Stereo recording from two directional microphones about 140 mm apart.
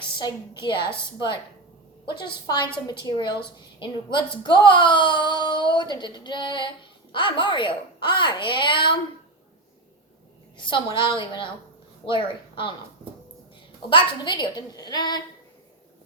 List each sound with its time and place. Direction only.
0.6 s a woman's voice: 35° left (ahead or behind)
2.0 s a woman's voice: 35° left (ahead or behind)
10.6 s a woman's voice: 35° left (ahead or behind)
13.9 s a woman's voice: 30° left (ahead or behind)